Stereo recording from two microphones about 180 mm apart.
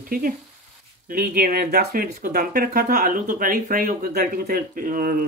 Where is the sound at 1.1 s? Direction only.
50° right (ahead or behind).